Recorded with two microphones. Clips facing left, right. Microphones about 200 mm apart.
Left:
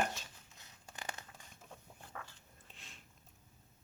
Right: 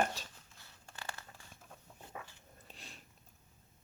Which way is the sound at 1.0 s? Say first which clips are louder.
Left 1 dB; 15° left (ahead or behind).